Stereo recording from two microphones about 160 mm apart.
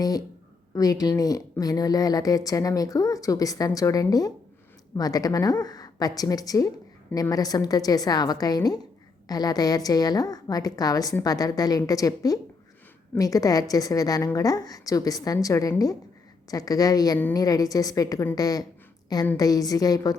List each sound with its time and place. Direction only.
0.7 s a woman's voice: 25° left (ahead or behind)